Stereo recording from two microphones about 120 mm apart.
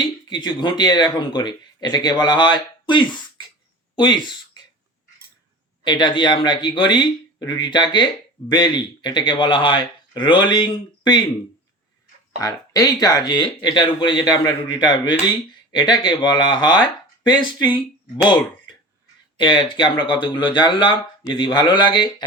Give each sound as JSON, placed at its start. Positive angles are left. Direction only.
{"t": 0.0, "sound": "speech", "side_deg": 35}
{"t": 5.8, "sound": "speech", "side_deg": 40}
{"t": 12.4, "sound": "speech", "side_deg": 30}
{"t": 19.4, "sound": "speech", "side_deg": 40}